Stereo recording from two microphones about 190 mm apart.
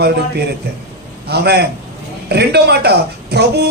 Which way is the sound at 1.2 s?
60° right (ahead or behind).